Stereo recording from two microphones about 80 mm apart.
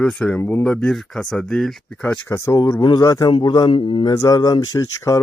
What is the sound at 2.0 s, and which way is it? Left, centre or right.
Speech, left.